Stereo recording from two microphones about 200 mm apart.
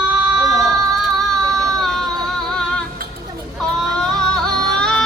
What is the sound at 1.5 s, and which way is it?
Music, centre (ahead or behind).